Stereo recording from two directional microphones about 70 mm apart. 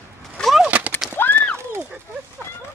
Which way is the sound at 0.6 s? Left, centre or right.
Right.